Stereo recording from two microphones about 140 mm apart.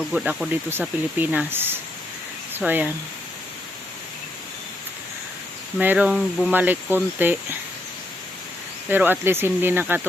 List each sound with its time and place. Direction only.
0.1 s speech: 5° right (ahead or behind)
0.7 s speech: 15° right (ahead or behind)
5.8 s speech: 10° right (ahead or behind)
8.9 s speech: 15° right (ahead or behind)